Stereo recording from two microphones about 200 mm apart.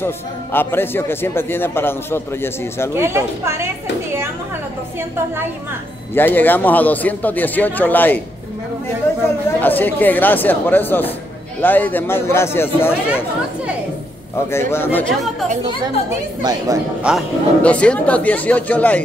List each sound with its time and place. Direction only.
0.0 s a man's voice: 10° left (ahead or behind)
3.0 s a woman's voice: 10° right (ahead or behind)
6.1 s a man's voice: 10° left (ahead or behind)
9.6 s a man's voice: 10° left (ahead or behind)
14.5 s a man's voice: 10° left (ahead or behind)
16.4 s a woman's voice: 15° right (ahead or behind)
17.0 s a man's voice: centre (ahead or behind)